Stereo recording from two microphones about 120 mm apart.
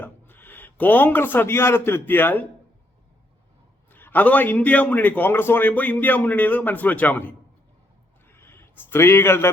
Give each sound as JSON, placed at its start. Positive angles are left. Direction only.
{"t": 0.0, "sound": "a man's voice", "side_deg": 15}
{"t": 3.9, "sound": "a man's voice", "side_deg": 15}
{"t": 8.3, "sound": "a sound", "side_deg": 20}